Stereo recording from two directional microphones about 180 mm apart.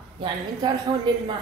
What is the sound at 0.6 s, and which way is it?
Speech, 25° right (ahead or behind).